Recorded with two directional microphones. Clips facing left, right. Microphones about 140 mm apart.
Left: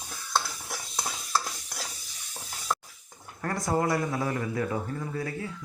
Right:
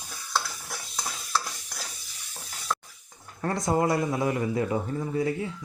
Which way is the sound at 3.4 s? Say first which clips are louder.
Right 2 dB; 20° right (ahead or behind).